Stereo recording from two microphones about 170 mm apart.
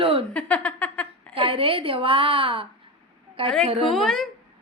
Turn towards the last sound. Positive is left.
turn(degrees=5)  # may be behind; listen again after turning